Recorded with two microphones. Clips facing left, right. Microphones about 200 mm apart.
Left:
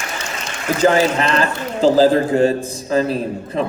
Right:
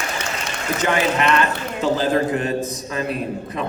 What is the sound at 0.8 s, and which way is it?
A man's voice, 35° left (ahead or behind).